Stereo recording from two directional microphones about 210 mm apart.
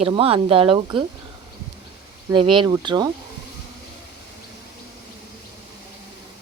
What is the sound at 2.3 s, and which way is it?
Speech, 25° right (ahead or behind).